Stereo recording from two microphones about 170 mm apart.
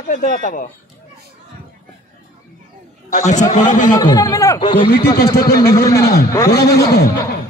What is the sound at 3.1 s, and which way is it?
Speech, 45° left (ahead or behind).